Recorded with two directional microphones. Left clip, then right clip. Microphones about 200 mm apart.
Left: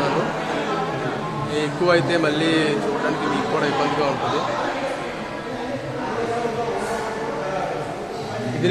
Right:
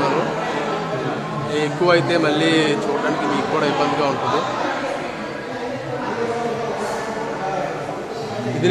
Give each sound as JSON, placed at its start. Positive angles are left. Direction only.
{"t": 1.5, "sound": "a man's voice", "side_deg": -10}